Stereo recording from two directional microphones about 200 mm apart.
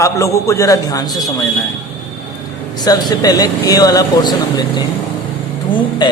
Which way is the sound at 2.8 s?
20° left (ahead or behind).